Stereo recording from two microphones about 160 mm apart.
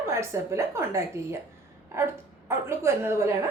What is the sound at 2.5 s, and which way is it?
Speech, 15° right (ahead or behind).